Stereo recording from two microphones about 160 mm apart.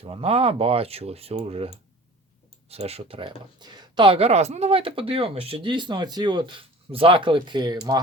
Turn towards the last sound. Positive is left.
turn(degrees=-25)  # may be behind; listen again after turning